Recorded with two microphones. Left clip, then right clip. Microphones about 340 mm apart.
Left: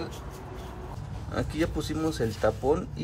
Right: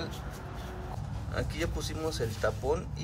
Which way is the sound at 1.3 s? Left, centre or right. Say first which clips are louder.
Left 5 dB; centre.